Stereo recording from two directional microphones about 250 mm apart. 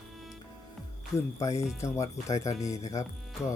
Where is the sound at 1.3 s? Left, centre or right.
Centre.